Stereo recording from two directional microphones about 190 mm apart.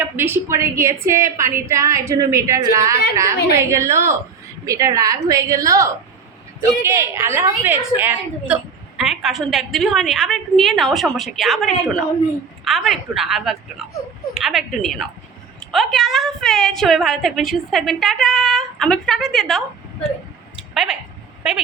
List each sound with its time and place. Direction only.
0.0 s a woman's voice: 10° right (ahead or behind)
20.7 s a woman's voice: 5° right (ahead or behind)